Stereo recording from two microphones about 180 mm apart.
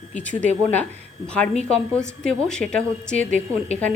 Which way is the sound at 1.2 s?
5° left (ahead or behind).